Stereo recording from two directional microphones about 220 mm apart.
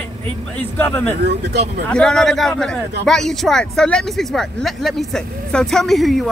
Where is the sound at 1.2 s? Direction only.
50° right (ahead or behind).